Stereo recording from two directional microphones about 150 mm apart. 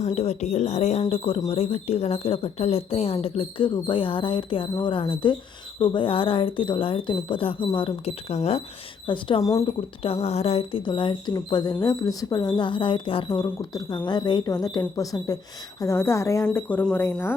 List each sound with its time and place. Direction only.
0.0 s speech: 45° left (ahead or behind)
9.0 s speech: 35° left (ahead or behind)
9.4 s speech: 20° left (ahead or behind)
10.0 s speech: 40° left (ahead or behind); by 17.3 s 15° left (ahead or behind)